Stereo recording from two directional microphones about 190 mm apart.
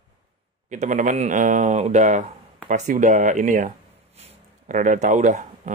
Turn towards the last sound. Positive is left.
turn(degrees=-40)  # may be behind; listen again after turning